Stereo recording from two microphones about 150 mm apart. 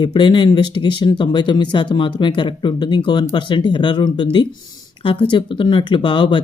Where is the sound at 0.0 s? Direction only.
30° left (ahead or behind).